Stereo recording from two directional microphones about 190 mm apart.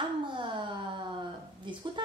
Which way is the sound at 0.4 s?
25° right (ahead or behind).